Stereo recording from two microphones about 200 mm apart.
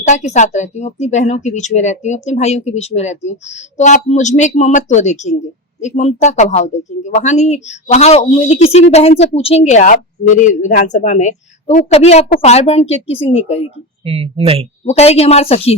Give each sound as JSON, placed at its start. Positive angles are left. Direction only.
{"t": 0.1, "sound": "speech", "side_deg": 35}
{"t": 14.0, "sound": "speech", "side_deg": -30}
{"t": 14.8, "sound": "speech", "side_deg": 30}